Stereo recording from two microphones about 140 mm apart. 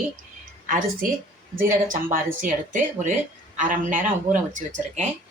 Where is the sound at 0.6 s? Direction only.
80° right.